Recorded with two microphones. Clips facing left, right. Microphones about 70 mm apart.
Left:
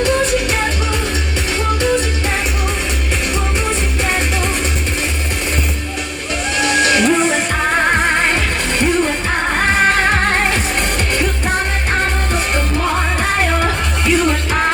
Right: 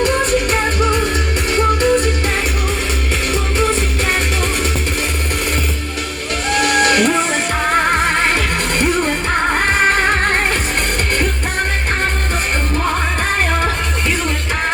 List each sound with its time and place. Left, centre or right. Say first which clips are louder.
0.0 s music: even; right
6.5 s music: right 1 dB; right